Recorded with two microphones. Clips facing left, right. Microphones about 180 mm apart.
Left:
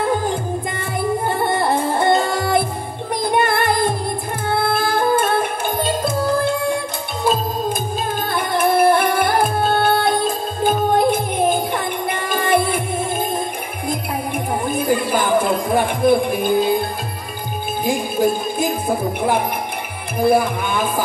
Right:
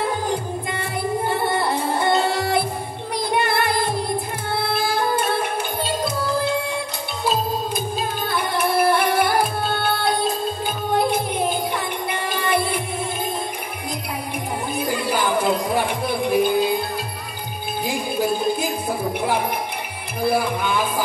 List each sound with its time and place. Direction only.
1.3 s music: 50° left (ahead or behind)
8.3 s music: 50° left (ahead or behind)
14.7 s music: 50° left (ahead or behind)
17.8 s music: 50° left (ahead or behind)
20.2 s speech: 50° left (ahead or behind)